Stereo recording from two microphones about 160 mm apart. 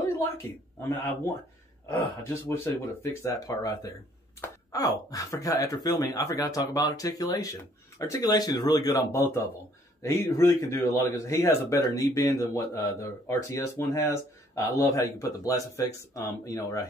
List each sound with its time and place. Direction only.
0.8 s speech: 15° left (ahead or behind)